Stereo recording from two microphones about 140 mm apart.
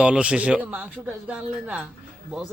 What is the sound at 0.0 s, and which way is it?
Speech, 10° right (ahead or behind).